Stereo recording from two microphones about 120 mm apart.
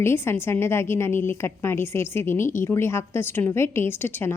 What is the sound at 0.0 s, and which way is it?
A woman's voice, 20° left (ahead or behind).